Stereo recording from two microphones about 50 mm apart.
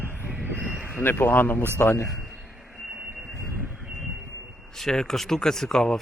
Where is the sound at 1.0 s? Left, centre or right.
Left.